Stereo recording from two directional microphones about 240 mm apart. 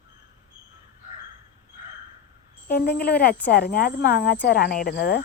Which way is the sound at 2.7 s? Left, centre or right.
Left.